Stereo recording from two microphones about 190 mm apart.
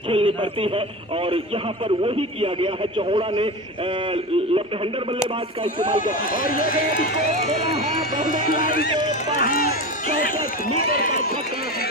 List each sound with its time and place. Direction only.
0.1 s speech: 30° right (ahead or behind)
2.0 s a man's voice: 30° right (ahead or behind)
6.3 s speech: 45° left (ahead or behind)
8.3 s speech: 45° left (ahead or behind)